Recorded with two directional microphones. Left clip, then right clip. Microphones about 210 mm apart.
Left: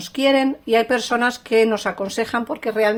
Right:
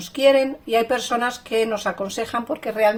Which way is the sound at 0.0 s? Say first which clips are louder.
Right 1 dB; 40° left (ahead or behind).